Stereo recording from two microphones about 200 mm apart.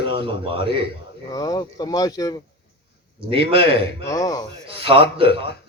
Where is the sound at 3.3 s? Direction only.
25° right (ahead or behind).